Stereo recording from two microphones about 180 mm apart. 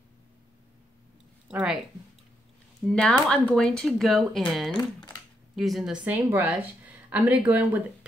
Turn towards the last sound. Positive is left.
turn(degrees=-10)  # may be behind; listen again after turning